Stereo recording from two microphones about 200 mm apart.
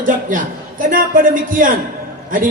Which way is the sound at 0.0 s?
40° right (ahead or behind).